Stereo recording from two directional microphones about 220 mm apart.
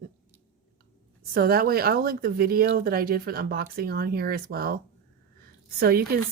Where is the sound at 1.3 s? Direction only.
45° right (ahead or behind).